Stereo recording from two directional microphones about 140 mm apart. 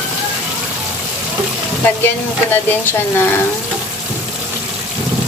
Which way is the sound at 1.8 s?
15° left (ahead or behind).